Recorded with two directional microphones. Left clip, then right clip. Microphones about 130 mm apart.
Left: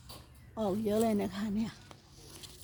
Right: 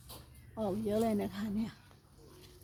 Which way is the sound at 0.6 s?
45° left (ahead or behind).